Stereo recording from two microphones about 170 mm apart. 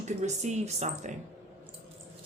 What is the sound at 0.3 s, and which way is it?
Speech, 40° right (ahead or behind).